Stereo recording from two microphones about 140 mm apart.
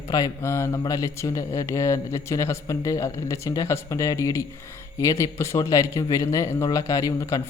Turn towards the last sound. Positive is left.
turn(degrees=25)  # may be behind; listen again after turning